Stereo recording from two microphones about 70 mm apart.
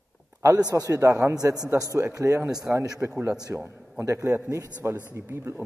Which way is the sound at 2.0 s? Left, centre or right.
Right.